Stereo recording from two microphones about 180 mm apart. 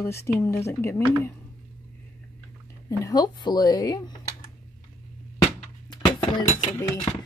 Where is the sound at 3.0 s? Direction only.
20° left (ahead or behind).